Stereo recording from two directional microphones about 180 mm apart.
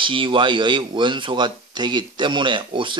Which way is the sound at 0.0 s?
30° right (ahead or behind).